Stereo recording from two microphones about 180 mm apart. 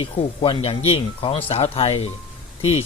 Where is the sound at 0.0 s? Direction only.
30° left (ahead or behind).